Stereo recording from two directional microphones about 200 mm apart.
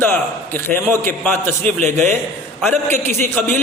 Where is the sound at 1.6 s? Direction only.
35° right (ahead or behind).